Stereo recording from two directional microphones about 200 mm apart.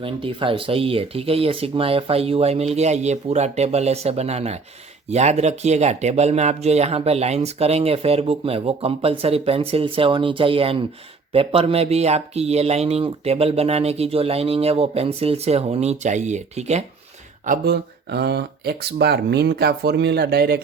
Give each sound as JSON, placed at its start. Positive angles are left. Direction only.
{"t": 0.0, "sound": "speech", "side_deg": -25}
{"t": 17.4, "sound": "speech", "side_deg": -50}